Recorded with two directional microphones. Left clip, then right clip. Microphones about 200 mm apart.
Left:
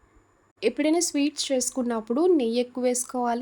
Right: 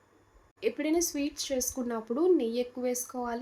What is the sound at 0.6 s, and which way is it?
Speech, 55° left (ahead or behind).